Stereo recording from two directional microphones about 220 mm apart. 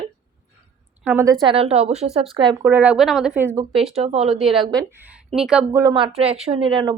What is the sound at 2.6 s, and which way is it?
Speech, 10° right (ahead or behind).